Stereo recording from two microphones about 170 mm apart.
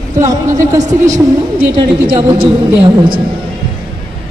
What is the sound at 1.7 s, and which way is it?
Speech, 30° right (ahead or behind).